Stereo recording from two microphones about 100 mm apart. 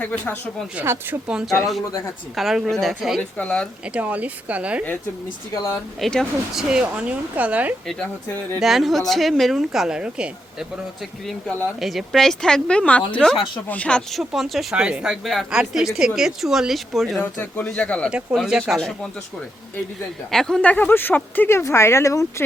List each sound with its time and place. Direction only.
0.0 s a woman's voice: 15° left (ahead or behind)
0.8 s speech: 20° right (ahead or behind)
1.3 s speech: 5° right (ahead or behind)
3.2 s a woman's voice: 15° left (ahead or behind)
3.9 s speech: 15° right (ahead or behind)
6.0 s speech: centre (ahead or behind); by 7.8 s 15° right (ahead or behind)
8.6 s speech: centre (ahead or behind)
11.3 s a woman's voice: 10° left (ahead or behind)
11.8 s a woman's voice: centre (ahead or behind)
17.2 s a woman's voice: 15° left (ahead or behind)
18.3 s speech: 5° right (ahead or behind)
20.3 s speech: 5° left (ahead or behind); by 22.4 s 30° left (ahead or behind)